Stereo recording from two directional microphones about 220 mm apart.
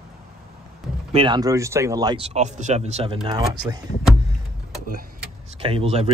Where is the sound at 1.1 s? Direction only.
25° right (ahead or behind).